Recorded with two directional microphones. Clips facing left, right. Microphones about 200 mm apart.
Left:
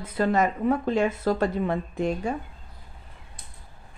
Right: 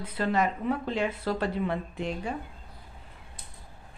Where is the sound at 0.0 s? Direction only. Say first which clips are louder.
Left 4 dB; 45° left (ahead or behind).